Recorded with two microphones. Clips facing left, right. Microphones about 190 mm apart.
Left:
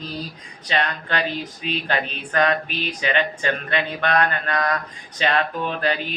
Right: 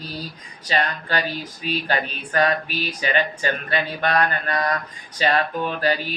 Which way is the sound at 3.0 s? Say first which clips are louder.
Even; 40° right (ahead or behind).